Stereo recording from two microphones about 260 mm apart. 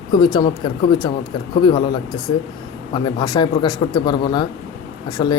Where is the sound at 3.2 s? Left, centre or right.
Centre.